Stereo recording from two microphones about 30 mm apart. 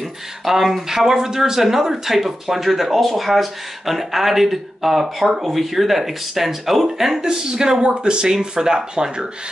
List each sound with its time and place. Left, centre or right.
0.5 s speech: centre
7.2 s speech: right
7.8 s speech: right